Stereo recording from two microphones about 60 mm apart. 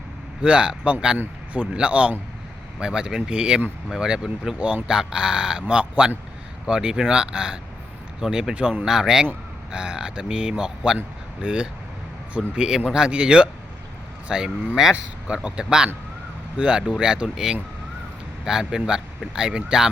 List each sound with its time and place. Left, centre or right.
0.4 s a man's voice: centre
4.6 s a man's voice: right
6.7 s speech: centre